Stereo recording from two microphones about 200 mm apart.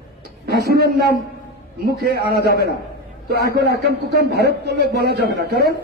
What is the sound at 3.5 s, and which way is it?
A man's voice, 55° right (ahead or behind).